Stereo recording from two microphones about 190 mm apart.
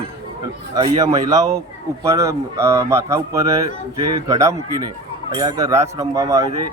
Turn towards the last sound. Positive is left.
turn(degrees=-15)  # may be behind; listen again after turning